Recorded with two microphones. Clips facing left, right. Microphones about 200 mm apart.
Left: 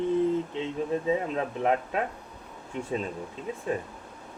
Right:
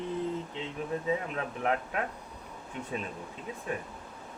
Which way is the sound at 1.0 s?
25° left (ahead or behind).